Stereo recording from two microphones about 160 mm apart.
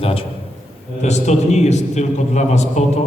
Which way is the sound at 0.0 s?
35° left (ahead or behind).